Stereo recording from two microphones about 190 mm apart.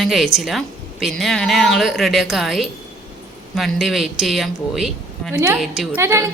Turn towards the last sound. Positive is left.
turn(degrees=-15)  # may be behind; listen again after turning